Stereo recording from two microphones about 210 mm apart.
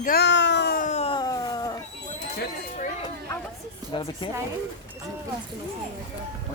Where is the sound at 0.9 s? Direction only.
30° left (ahead or behind).